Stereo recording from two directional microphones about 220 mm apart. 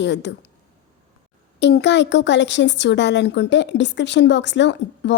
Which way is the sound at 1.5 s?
50° left (ahead or behind).